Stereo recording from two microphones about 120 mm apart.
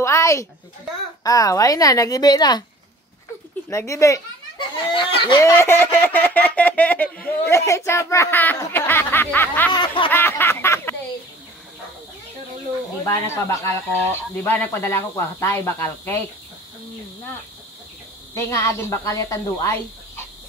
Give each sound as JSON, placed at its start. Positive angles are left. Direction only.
{"t": 0.0, "sound": "a sound", "side_deg": 25}
{"t": 1.2, "sound": "speech", "side_deg": 30}
{"t": 3.7, "sound": "speech", "side_deg": 25}
{"t": 4.6, "sound": "speech", "side_deg": 45}
{"t": 5.4, "sound": "speech", "side_deg": 20}
{"t": 9.7, "sound": "snicker", "side_deg": 40}
{"t": 10.0, "sound": "a sound", "side_deg": 15}
{"t": 13.0, "sound": "speech", "side_deg": 25}
{"t": 14.3, "sound": "speech", "side_deg": 15}
{"t": 18.3, "sound": "speech", "side_deg": 25}